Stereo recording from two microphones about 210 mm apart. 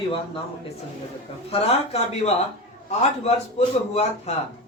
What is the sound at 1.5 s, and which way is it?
A man's voice, 30° left (ahead or behind).